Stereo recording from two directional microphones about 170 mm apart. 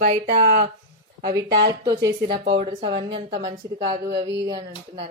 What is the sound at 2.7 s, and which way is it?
A woman's voice, 25° right (ahead or behind).